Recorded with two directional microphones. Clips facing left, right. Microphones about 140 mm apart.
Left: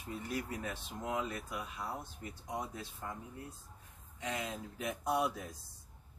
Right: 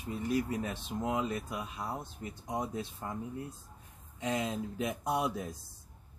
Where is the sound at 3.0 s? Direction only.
25° right (ahead or behind).